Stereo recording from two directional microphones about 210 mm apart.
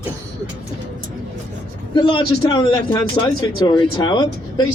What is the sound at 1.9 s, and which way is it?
A man's voice, 25° left (ahead or behind).